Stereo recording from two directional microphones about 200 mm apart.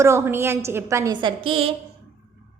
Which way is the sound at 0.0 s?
15° right (ahead or behind).